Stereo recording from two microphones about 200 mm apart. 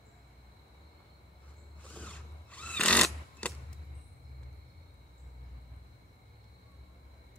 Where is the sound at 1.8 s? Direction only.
5° left (ahead or behind).